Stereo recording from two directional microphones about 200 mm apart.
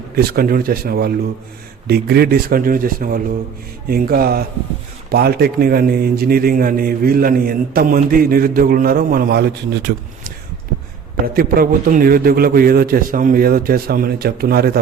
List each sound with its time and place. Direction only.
0.2 s a man's voice: 50° right (ahead or behind)
11.3 s a man's voice: 45° right (ahead or behind)